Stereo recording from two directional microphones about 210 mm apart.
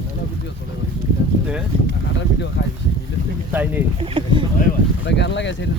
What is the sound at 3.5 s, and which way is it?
Speech, 10° right (ahead or behind).